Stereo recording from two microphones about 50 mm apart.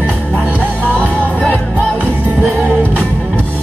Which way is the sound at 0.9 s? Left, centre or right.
Left.